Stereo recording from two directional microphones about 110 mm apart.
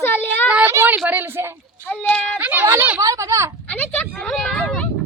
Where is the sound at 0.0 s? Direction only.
20° left (ahead or behind).